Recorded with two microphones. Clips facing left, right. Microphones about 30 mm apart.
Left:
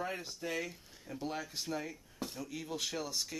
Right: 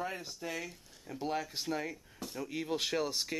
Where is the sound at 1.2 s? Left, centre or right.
Centre.